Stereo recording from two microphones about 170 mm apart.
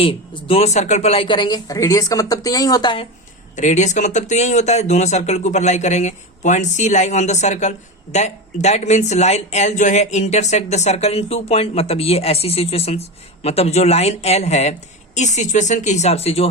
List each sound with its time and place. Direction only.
0.0 s speech: 30° left (ahead or behind)
3.5 s speech: 45° left (ahead or behind)